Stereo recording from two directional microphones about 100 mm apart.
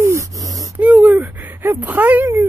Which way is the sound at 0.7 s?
15° right (ahead or behind).